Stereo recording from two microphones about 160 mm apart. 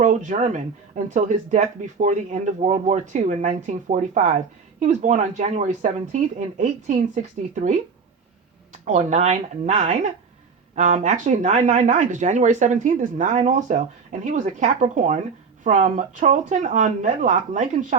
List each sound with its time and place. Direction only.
0.0 s speech: 50° right (ahead or behind)
8.8 s speech: 50° right (ahead or behind)